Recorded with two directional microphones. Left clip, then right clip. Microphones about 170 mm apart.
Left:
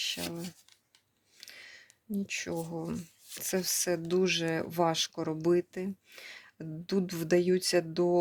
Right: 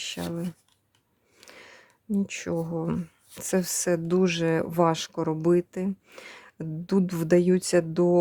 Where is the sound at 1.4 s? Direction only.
35° right (ahead or behind).